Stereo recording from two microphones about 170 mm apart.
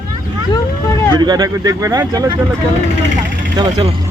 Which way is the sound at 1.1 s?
25° right (ahead or behind).